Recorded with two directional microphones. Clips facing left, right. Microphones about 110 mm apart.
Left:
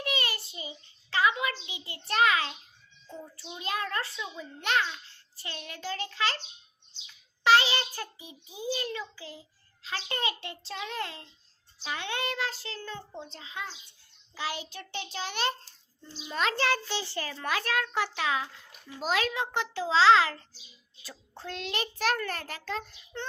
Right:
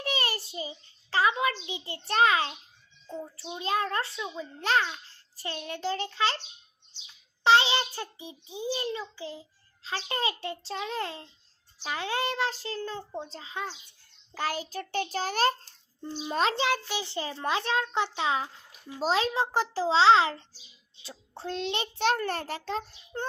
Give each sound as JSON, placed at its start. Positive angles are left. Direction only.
{"t": 0.0, "sound": "child singing", "side_deg": -35}
{"t": 3.1, "sound": "a child's voice", "side_deg": -25}
{"t": 7.4, "sound": "a child's voice", "side_deg": -25}
{"t": 14.3, "sound": "a child's voice", "side_deg": -45}
{"t": 16.6, "sound": "a child's voice", "side_deg": -15}
{"t": 18.3, "sound": "a child's voice", "side_deg": -35}